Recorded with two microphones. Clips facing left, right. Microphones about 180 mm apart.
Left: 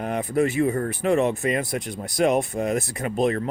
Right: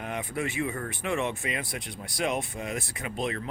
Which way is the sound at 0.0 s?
40° left (ahead or behind).